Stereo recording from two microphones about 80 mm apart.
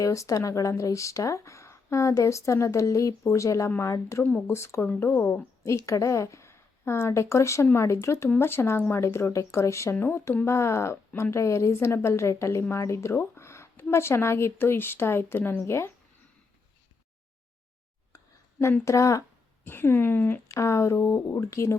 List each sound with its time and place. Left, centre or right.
0.0 s speech: left
4.2 s speech: centre
4.4 s speech: left
5.6 s speech: left
18.1 s a sound: left
18.9 s speech: left
19.6 s speech: left
20.5 s speech: left